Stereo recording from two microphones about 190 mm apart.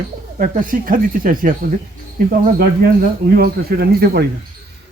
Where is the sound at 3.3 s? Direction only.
55° right (ahead or behind).